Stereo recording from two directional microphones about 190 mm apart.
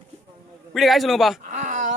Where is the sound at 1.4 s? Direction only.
40° right (ahead or behind).